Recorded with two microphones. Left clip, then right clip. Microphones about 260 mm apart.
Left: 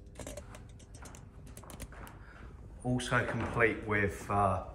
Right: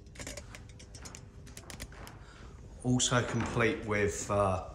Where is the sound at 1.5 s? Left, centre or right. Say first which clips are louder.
Right 2 dB; centre.